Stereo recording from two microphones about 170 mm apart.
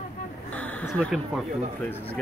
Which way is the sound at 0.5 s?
5° left (ahead or behind).